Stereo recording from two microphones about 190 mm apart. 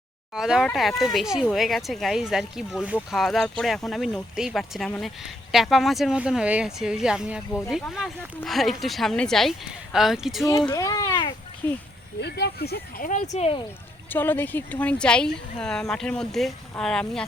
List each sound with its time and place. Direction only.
0.3 s speech: 5° right (ahead or behind)
10.7 s speech: 20° left (ahead or behind)
12.2 s speech: 60° left (ahead or behind)
13.3 s speech: 30° left (ahead or behind)
14.1 s speech: 10° left (ahead or behind)